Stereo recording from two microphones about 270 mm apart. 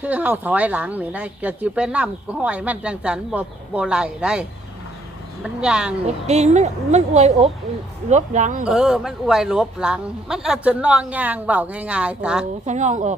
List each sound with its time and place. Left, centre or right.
0.0 s speech: centre
6.1 s speech: right
8.6 s speech: centre
12.6 s speech: right